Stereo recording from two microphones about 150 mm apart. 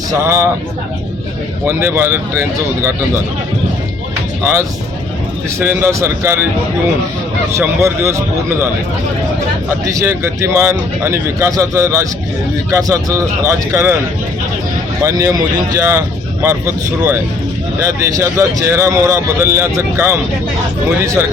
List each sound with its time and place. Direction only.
0.1 s speech: 20° right (ahead or behind)
1.6 s speech: 15° right (ahead or behind)
5.5 s speech: 15° right (ahead or behind)
7.5 s speech: 15° right (ahead or behind)
9.8 s speech: 20° right (ahead or behind)
15.0 s speech: 25° right (ahead or behind)